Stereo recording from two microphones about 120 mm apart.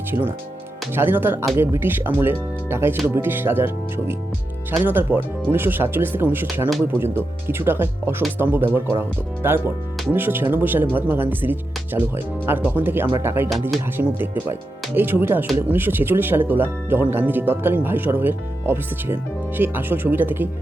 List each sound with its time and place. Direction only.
0.1 s speech: 20° right (ahead or behind)